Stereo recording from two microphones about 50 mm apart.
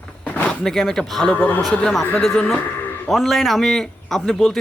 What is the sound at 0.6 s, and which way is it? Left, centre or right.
Speech, centre.